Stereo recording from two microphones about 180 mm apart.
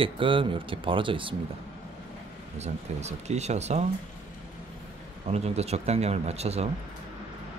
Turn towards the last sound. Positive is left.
turn(degrees=-35)  # may be behind; listen again after turning